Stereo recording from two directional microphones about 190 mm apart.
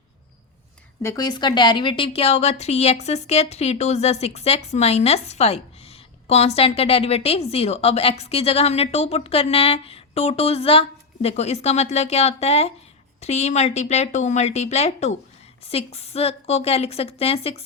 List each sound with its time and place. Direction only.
1.0 s a woman's voice: 20° left (ahead or behind)